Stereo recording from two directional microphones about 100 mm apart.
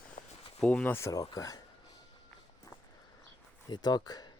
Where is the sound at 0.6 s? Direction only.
15° left (ahead or behind).